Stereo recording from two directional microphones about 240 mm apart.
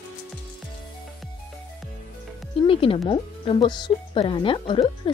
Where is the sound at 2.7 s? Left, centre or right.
Left.